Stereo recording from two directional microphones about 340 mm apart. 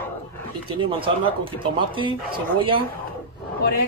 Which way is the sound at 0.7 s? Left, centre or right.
Centre.